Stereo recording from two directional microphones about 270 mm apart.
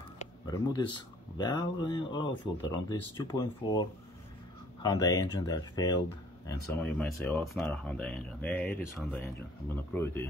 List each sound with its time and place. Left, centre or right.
0.2 s speech: centre
4.8 s speech: centre